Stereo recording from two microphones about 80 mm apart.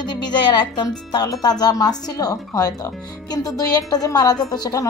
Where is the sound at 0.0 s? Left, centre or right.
Left.